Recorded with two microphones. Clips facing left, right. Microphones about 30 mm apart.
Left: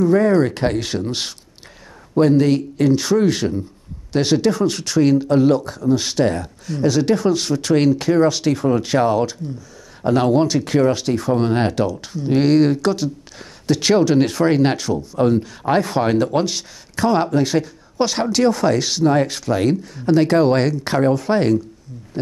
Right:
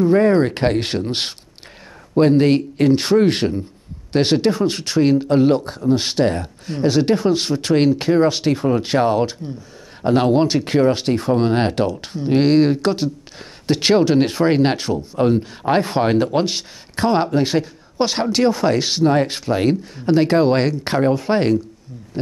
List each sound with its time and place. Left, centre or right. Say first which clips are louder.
0.0 s speech: right 1 dB; right
2.1 s speech: right 1 dB; right
15.1 s speech: even; right